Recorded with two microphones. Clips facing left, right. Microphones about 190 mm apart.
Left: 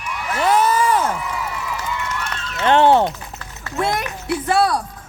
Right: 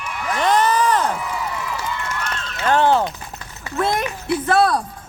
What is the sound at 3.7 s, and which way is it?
Speech, 10° left (ahead or behind).